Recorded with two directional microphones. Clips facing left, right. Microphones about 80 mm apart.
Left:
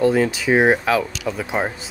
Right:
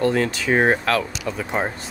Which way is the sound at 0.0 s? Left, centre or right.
Centre.